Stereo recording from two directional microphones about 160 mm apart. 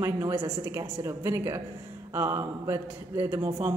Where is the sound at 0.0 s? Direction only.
15° right (ahead or behind).